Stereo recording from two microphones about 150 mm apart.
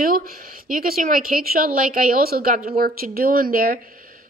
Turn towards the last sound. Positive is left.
turn(degrees=-70)  # may be behind; listen again after turning